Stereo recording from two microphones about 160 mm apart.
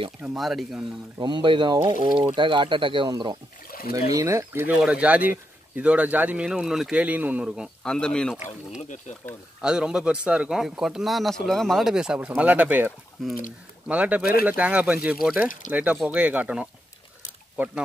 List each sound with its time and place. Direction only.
0.4 s speech: centre (ahead or behind)
1.1 s speech: 30° right (ahead or behind); by 8.4 s 5° left (ahead or behind)
8.8 s speech: 50° left (ahead or behind)
9.6 s speech: 5° right (ahead or behind)